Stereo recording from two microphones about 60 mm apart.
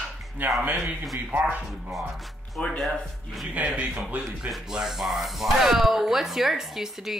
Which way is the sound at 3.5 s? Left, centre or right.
Right.